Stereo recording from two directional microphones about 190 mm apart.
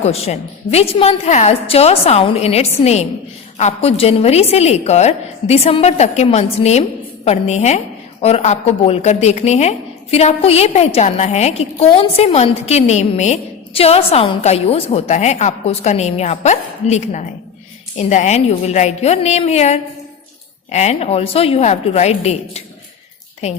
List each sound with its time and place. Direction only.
0.0 s a woman's voice: 35° left (ahead or behind)